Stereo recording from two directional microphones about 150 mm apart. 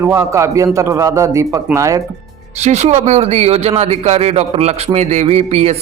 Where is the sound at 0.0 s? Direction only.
20° right (ahead or behind).